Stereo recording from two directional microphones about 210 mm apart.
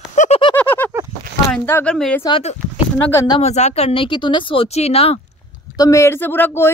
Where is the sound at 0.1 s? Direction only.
35° left (ahead or behind).